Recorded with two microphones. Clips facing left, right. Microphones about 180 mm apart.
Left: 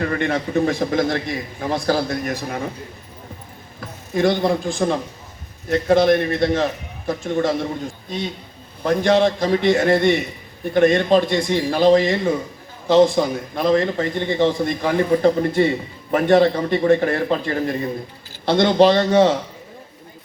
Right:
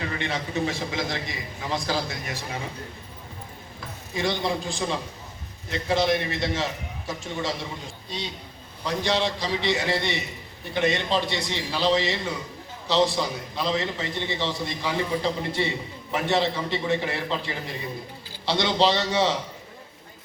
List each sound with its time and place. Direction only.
0.0 s a man's voice: 50° left (ahead or behind)
4.1 s a man's voice: 50° left (ahead or behind)
8.8 s a man's voice: 50° left (ahead or behind)